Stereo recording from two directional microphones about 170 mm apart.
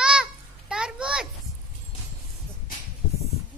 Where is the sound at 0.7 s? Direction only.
5° right (ahead or behind).